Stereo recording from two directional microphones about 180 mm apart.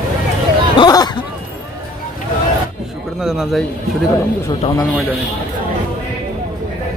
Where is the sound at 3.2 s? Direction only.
Centre (ahead or behind).